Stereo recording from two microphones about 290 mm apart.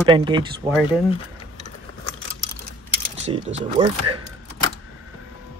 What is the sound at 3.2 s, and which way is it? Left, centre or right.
Speech, centre.